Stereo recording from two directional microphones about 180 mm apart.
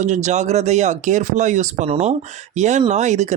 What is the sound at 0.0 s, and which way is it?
Speech, 40° right (ahead or behind).